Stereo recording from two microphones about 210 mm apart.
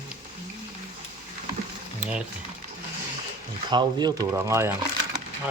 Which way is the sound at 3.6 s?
20° right (ahead or behind).